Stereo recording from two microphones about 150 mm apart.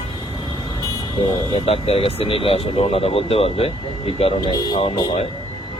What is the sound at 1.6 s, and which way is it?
Speech, 45° left (ahead or behind).